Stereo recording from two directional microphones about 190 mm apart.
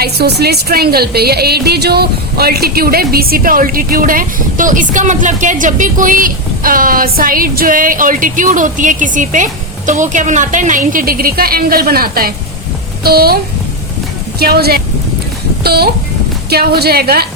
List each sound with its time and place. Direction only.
0.0 s a woman's voice: 60° right (ahead or behind)